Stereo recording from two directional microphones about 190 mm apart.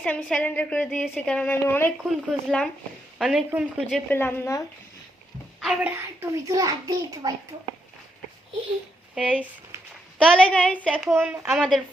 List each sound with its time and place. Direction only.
0.0 s a woman's voice: 5° left (ahead or behind)
4.1 s a woman's voice: 10° left (ahead or behind)
5.5 s a sound: centre (ahead or behind)
6.1 s a child's voice: 15° right (ahead or behind)
9.1 s a woman's voice: 5° right (ahead or behind)
10.2 s a woman's voice: 5° left (ahead or behind)
11.1 s a woman's voice: 10° right (ahead or behind)
11.5 s speech: centre (ahead or behind)